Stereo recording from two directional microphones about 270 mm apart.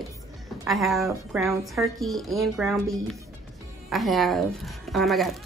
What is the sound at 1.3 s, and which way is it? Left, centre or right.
Speech, centre.